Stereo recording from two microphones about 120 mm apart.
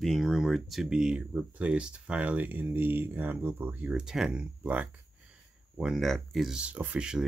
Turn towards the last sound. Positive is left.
turn(degrees=-5)  # may be behind; listen again after turning